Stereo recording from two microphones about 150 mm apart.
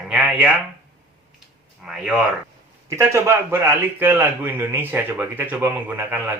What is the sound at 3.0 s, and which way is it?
A man's voice, 15° right (ahead or behind).